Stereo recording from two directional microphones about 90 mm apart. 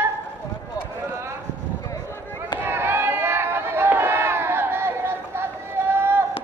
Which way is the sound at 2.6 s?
25° right (ahead or behind).